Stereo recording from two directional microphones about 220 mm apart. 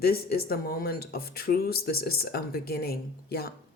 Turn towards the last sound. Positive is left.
turn(degrees=45)  # may be behind; listen again after turning